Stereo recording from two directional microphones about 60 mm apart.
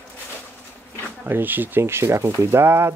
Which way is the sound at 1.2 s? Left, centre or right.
Right.